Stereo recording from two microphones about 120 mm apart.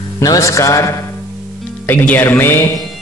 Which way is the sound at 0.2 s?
30° left (ahead or behind).